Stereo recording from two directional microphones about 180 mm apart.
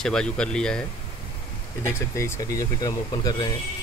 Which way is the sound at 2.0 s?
15° left (ahead or behind).